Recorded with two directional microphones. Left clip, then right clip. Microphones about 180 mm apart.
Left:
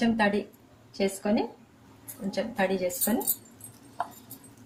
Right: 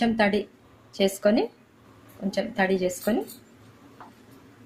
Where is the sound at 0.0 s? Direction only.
45° right (ahead or behind).